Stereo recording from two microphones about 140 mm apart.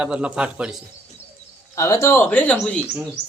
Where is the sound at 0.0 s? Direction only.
10° right (ahead or behind).